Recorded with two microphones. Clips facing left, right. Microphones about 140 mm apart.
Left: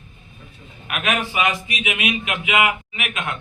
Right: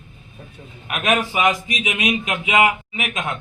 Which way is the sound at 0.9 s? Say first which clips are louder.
Right 3 dB; 30° right (ahead or behind).